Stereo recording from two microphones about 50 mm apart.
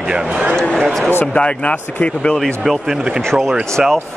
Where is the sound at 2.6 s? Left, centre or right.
Centre.